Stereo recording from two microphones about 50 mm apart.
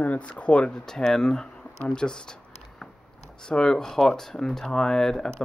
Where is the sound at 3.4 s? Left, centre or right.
Centre.